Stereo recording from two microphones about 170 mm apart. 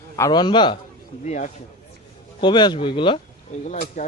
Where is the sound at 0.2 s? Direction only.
25° left (ahead or behind).